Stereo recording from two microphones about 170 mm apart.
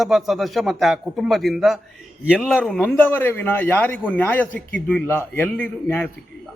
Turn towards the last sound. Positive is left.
turn(degrees=10)  # may be behind; listen again after turning